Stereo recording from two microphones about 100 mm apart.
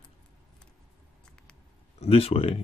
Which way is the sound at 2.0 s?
90° left.